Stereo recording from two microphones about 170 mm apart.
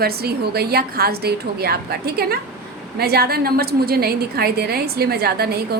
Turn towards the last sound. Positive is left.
turn(degrees=-65)  # may be behind; listen again after turning